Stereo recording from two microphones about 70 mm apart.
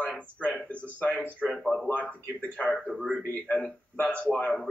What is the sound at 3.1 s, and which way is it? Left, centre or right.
A man's voice, centre.